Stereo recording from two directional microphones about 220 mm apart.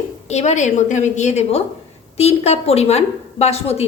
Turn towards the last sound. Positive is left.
turn(degrees=30)  # may be behind; listen again after turning